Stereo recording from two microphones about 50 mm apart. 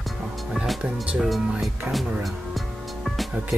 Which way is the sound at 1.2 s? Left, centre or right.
Centre.